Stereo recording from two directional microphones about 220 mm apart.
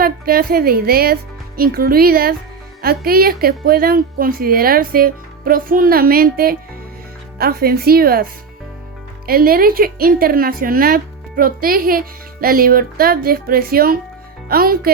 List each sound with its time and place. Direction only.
0.0 s a woman's voice: 40° right (ahead or behind)